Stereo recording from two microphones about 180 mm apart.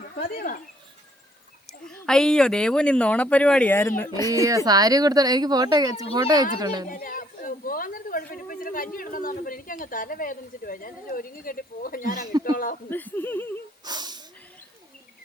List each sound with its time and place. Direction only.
0.2 s speech: 50° left (ahead or behind)
1.9 s speech: 5° left (ahead or behind)
4.4 s speech: 20° right (ahead or behind)
6.8 s a woman's voice: 50° left (ahead or behind)
12.9 s speech: 10° left (ahead or behind)
13.8 s a sound: 25° right (ahead or behind)